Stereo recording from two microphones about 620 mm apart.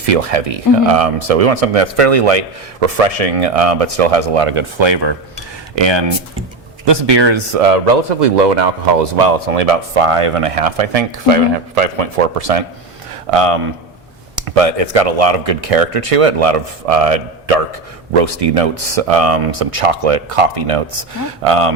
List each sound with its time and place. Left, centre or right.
0.0 s speech: right
7.5 s speech: right
13.3 s speech: right